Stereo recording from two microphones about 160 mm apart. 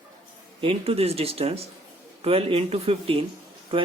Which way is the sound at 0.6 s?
35° right (ahead or behind).